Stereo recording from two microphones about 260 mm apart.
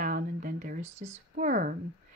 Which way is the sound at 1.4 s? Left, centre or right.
Right.